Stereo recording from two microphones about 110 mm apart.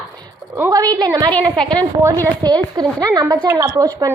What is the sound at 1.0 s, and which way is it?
A woman's voice, 40° right (ahead or behind).